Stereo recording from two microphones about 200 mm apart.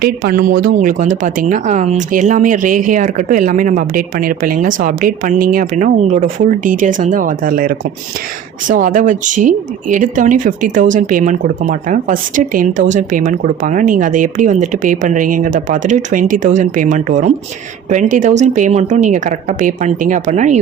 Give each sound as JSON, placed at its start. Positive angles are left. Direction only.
{"t": 0.0, "sound": "speech", "side_deg": -50}